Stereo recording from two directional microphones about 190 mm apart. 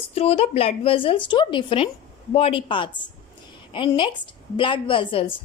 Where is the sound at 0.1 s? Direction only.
30° left (ahead or behind).